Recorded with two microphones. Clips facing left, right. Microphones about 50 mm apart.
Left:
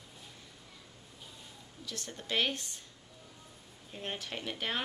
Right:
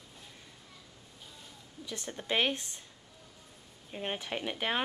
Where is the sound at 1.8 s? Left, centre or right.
Right.